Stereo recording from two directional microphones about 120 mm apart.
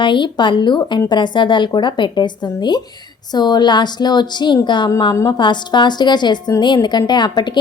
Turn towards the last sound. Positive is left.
turn(degrees=35)  # may be behind; listen again after turning